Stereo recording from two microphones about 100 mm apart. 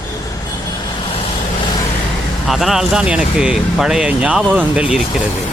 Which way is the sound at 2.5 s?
5° right (ahead or behind).